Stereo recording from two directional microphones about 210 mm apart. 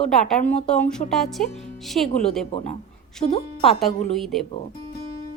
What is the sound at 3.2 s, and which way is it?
Speech, 30° left (ahead or behind).